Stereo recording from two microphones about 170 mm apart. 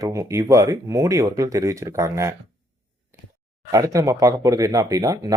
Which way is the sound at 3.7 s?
20° right (ahead or behind).